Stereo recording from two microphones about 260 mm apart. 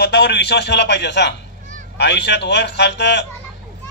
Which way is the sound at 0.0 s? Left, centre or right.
Left.